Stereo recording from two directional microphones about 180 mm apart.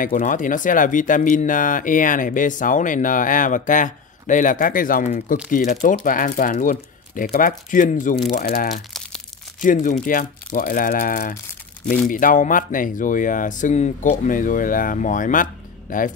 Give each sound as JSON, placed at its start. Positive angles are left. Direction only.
{"t": 0.0, "sound": "speech", "side_deg": 50}